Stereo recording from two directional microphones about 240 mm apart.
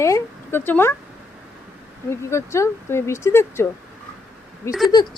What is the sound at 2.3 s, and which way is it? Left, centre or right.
Speech, centre.